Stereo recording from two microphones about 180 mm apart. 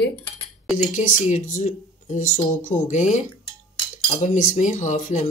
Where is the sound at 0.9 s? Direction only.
40° left (ahead or behind).